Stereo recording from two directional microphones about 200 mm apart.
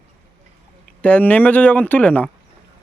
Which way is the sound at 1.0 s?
5° left (ahead or behind).